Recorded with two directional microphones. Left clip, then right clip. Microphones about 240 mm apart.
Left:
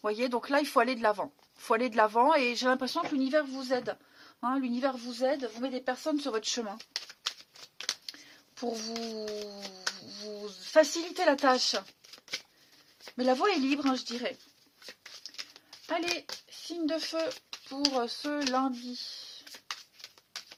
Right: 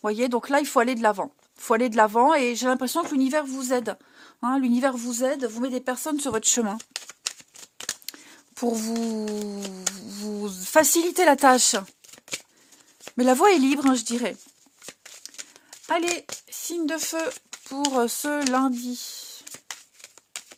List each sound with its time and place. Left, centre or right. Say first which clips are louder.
0.0 s speech: right 6 dB; right
3.1 s speech: right 4 dB; right
4.4 s a woman's voice: right 7 dB; right
4.7 s speech: right 8 dB; right
8.0 s whispering: right 4 dB; right
9.5 s speech: right 5 dB; right
13.1 s speech: right 9 dB; right
15.9 s speech: right 7 dB; right